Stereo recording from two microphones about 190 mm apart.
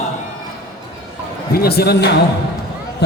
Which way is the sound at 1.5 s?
55° left (ahead or behind).